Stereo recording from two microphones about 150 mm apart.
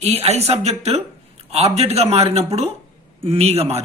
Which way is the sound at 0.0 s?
45° right (ahead or behind).